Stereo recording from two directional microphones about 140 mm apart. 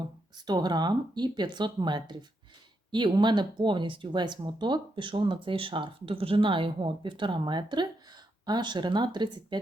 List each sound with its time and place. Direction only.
0.3 s speech: 30° right (ahead or behind)